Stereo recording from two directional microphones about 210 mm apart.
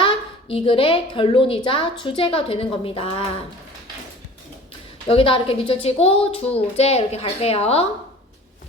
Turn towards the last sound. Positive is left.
turn(degrees=30)  # may be behind; listen again after turning